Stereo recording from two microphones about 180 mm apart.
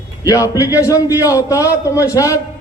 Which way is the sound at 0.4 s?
20° left (ahead or behind).